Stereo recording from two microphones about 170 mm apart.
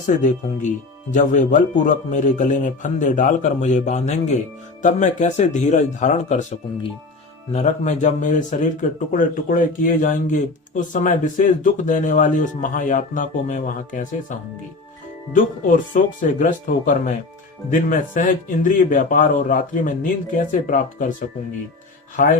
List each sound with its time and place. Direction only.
0.2 s speech: 45° left (ahead or behind)